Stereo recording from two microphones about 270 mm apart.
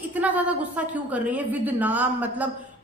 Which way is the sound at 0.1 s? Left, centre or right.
Centre.